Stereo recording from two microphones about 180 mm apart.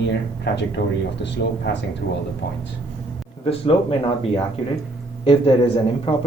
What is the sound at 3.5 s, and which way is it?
Speech, 30° left (ahead or behind).